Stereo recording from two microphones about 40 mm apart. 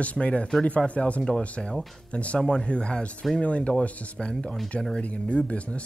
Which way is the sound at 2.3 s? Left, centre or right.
Centre.